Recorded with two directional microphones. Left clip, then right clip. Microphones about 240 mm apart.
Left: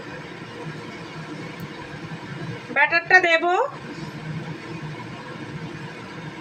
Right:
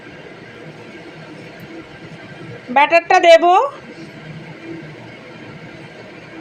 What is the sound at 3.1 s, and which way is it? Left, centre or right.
Speech, centre.